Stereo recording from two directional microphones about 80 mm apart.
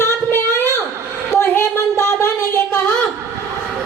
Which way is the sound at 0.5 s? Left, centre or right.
Left.